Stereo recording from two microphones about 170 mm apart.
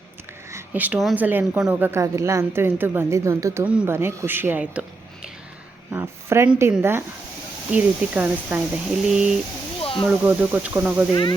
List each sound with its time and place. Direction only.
0.5 s a woman's voice: 10° right (ahead or behind)
9.8 s a sound: 30° left (ahead or behind)
10.1 s a woman's voice: 5° right (ahead or behind)
11.1 s speech: 25° left (ahead or behind)